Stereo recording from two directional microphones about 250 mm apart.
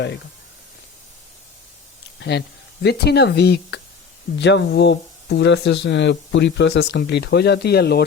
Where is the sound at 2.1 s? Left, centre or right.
Left.